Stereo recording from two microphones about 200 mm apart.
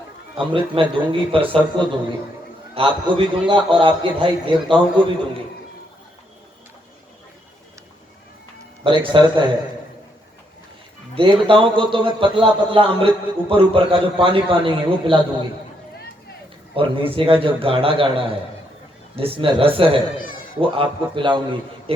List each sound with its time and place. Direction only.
0.3 s a man's voice: 25° right (ahead or behind)
8.8 s a man's voice: 25° right (ahead or behind)
11.1 s a man's voice: 25° right (ahead or behind)
16.7 s a man's voice: 25° right (ahead or behind)
20.2 s bleat: 45° left (ahead or behind)
20.6 s a man's voice: 25° right (ahead or behind)